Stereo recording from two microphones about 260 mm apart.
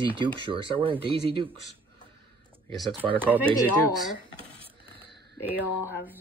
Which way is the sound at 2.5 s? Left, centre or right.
Centre.